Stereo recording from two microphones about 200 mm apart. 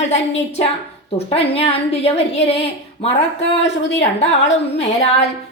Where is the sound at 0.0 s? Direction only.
35° left (ahead or behind).